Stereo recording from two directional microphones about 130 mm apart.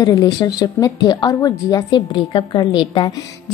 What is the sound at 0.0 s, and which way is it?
A woman's voice, 30° left (ahead or behind).